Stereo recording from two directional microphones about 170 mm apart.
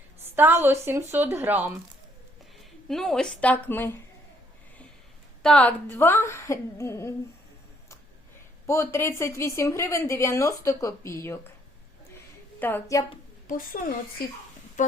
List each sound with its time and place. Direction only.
0.3 s a woman's voice: 10° right (ahead or behind)
2.9 s a woman's voice: 5° left (ahead or behind)
5.4 s a woman's voice: 5° left (ahead or behind)
8.6 s a woman's voice: 15° left (ahead or behind)
12.5 s a woman's voice: 10° left (ahead or behind)
13.5 s a woman's voice: 55° left (ahead or behind)